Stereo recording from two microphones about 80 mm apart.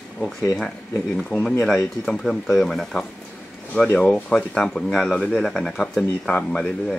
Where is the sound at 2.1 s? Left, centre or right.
Centre.